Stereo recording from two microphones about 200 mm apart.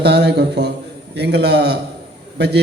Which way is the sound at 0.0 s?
55° right (ahead or behind).